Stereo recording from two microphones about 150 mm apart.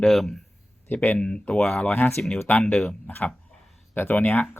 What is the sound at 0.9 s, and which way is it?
Speech, 10° left (ahead or behind).